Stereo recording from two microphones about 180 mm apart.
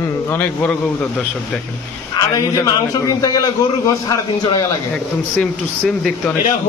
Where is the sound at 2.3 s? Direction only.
20° left (ahead or behind).